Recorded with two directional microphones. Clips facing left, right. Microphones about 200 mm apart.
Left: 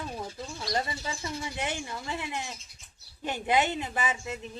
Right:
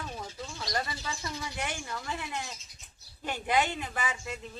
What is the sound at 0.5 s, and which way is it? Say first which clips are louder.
Speech: left 3 dB; 25° left (ahead or behind).